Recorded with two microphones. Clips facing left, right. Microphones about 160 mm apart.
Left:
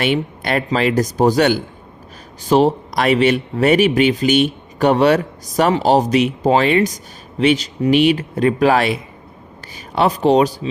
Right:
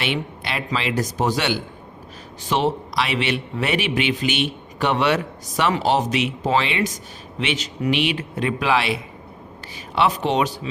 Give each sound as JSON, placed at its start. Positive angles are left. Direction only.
{"t": 0.0, "sound": "a man's voice", "side_deg": 45}